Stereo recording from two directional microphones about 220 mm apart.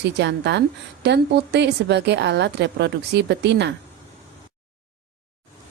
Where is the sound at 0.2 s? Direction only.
50° right (ahead or behind).